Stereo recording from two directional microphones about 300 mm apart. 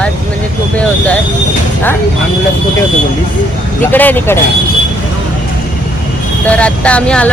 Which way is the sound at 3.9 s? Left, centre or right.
Centre.